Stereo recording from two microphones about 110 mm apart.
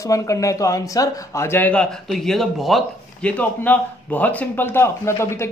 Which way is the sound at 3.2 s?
15° left (ahead or behind).